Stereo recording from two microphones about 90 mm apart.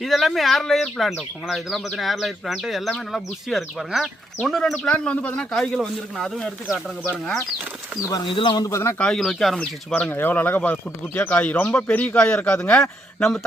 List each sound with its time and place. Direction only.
0.0 s a man's voice: centre (ahead or behind)
8.2 s speech: 65° left (ahead or behind)
8.6 s a man's voice: 30° left (ahead or behind)
9.0 s speech: 5° left (ahead or behind)
9.6 s a man's voice: 15° left (ahead or behind)